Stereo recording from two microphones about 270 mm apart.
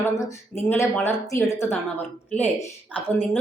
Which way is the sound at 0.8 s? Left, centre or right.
Centre.